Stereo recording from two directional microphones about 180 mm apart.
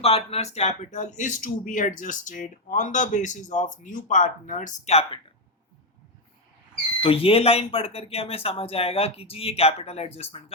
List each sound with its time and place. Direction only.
0.0 s speech: 35° left (ahead or behind)
7.0 s speech: 30° left (ahead or behind)